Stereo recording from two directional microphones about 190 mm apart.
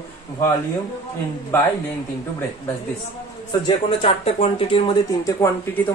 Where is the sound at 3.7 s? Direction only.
30° left (ahead or behind).